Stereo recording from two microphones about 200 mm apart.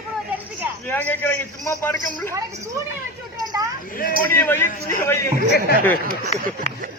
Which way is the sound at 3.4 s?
20° right (ahead or behind).